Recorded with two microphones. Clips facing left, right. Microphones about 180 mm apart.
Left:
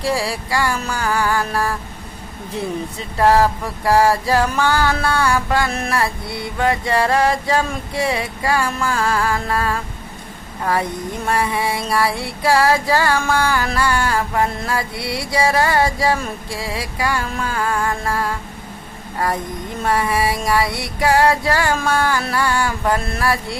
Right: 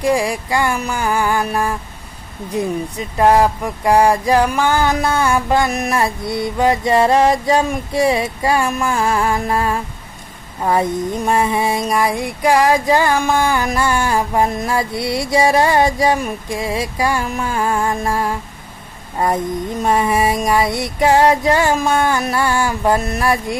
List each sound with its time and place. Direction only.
0.0 s music: 15° right (ahead or behind)